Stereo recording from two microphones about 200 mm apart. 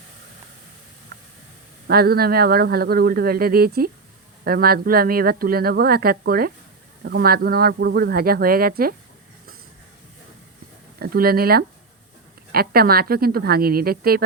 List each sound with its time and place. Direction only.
1.1 s a sound: 50° right (ahead or behind)
1.9 s speech: 50° right (ahead or behind)
11.0 s speech: 50° right (ahead or behind)